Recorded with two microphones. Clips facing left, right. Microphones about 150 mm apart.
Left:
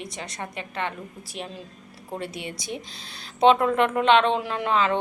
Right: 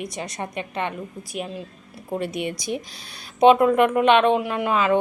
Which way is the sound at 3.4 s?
15° right (ahead or behind).